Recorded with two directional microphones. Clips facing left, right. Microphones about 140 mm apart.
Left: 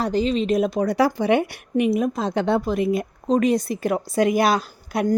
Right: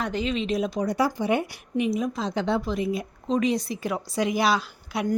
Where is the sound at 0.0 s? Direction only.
35° left (ahead or behind).